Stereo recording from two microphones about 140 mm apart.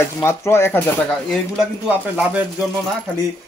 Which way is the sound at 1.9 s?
10° right (ahead or behind).